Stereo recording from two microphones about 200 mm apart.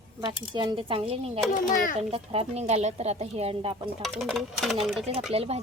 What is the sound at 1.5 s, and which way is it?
Speech, 40° left (ahead or behind).